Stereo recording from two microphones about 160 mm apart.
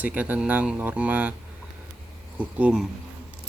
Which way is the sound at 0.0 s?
10° right (ahead or behind).